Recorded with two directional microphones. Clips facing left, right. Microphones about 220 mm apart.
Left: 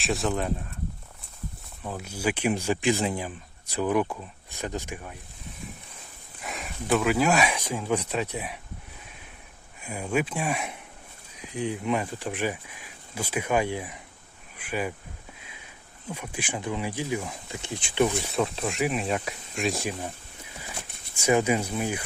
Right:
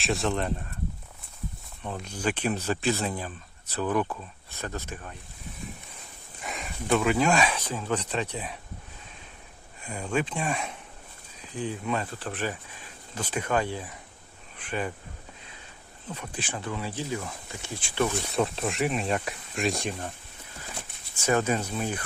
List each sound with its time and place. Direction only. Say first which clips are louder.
0.0 s speech: even; centre (ahead or behind)
1.8 s speech: left 1 dB; 5° left (ahead or behind)
6.4 s speech: even; centre (ahead or behind)
9.8 s speech: left 2 dB; 10° left (ahead or behind)
16.0 s speech: left 2 dB; 10° left (ahead or behind)
18.3 s speech: even; centre (ahead or behind)
21.2 s speech: left 2 dB; 10° left (ahead or behind)